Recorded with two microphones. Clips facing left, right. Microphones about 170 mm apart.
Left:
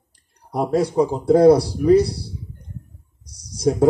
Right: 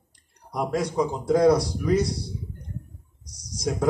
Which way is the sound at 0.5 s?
30° left (ahead or behind).